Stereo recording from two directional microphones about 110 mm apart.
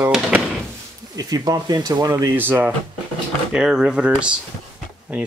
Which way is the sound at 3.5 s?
5° right (ahead or behind).